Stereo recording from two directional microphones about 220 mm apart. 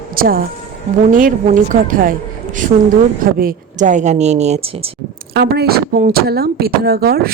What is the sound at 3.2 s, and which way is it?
A woman's voice, 40° right (ahead or behind).